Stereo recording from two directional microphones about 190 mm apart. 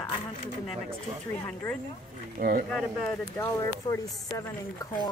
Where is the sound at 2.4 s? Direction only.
50° right (ahead or behind).